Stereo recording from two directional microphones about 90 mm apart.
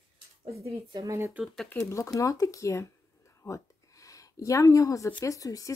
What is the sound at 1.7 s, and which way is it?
Speech, 30° left (ahead or behind).